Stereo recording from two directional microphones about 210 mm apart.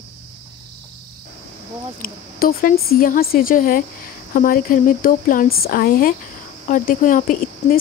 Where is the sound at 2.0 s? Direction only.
45° left (ahead or behind).